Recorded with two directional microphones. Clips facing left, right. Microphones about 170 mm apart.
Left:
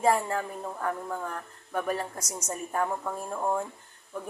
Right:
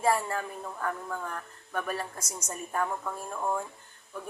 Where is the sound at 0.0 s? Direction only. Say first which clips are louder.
Left 2 dB; 15° left (ahead or behind).